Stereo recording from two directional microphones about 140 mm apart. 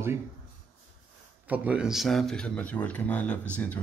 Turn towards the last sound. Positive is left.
turn(degrees=10)  # may be behind; listen again after turning